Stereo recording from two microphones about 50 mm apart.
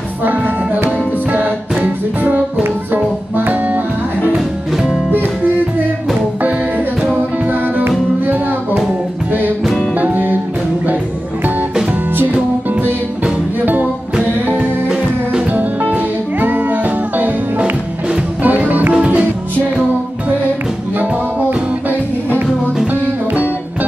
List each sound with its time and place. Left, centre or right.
0.2 s music: right
5.1 s music: right
7.1 s music: right
9.9 s music: right
14.4 s music: right
15.5 s music: right
21.4 s music: right